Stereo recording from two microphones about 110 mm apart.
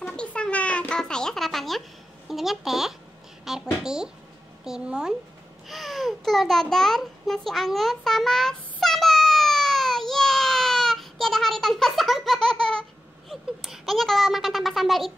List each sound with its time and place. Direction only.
0.0 s a sound: 10° left (ahead or behind)
2.2 s a woman's voice: centre (ahead or behind)
5.7 s babbling: centre (ahead or behind)
13.3 s a child's voice: centre (ahead or behind)